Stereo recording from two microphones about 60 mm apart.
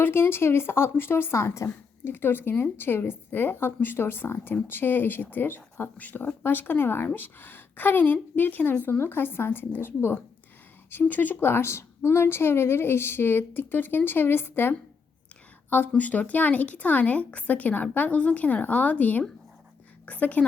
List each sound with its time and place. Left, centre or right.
0.0 s speech: left
2.1 s speech: left
16.0 s speech: left